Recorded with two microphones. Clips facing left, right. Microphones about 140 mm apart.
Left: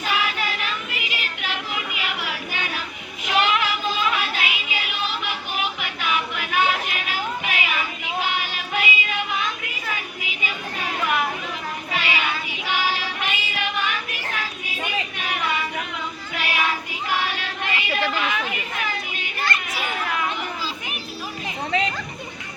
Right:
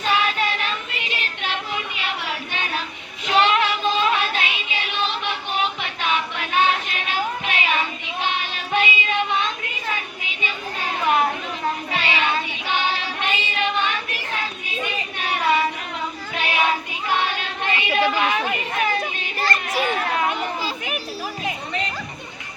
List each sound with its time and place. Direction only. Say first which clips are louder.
0.0 s child singing: right 4 dB; 30° right (ahead or behind)
11.0 s a sound: right 5 dB; 30° right (ahead or behind)
11.9 s child singing: left 1 dB; 30° right (ahead or behind)
16.3 s child singing: right 3 dB; 25° right (ahead or behind)
18.2 s chatter: right 4 dB; 30° right (ahead or behind)
19.4 s children playing: right 4 dB; 40° right (ahead or behind)